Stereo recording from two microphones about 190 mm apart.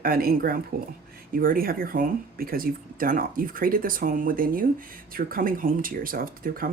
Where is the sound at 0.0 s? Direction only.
50° right (ahead or behind).